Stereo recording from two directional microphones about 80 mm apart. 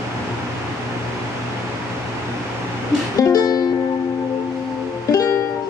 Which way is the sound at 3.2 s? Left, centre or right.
Left.